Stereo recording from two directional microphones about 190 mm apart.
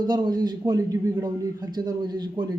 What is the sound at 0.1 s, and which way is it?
A man's voice, 20° right (ahead or behind).